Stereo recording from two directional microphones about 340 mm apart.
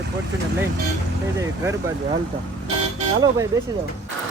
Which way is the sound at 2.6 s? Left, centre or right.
Centre.